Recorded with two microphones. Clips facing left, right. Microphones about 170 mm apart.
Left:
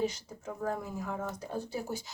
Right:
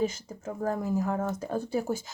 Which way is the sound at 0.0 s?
50° right (ahead or behind).